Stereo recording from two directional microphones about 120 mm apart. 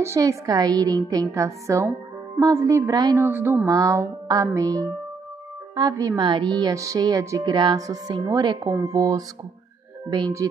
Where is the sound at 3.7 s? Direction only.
30° right (ahead or behind).